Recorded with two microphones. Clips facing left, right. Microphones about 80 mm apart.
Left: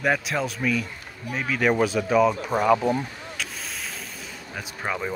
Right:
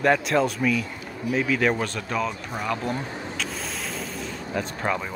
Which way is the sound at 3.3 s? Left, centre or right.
Centre.